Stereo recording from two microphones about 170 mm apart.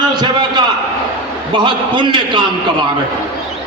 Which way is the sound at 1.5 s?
30° right (ahead or behind).